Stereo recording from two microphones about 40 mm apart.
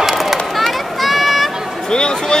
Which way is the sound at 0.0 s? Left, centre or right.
Centre.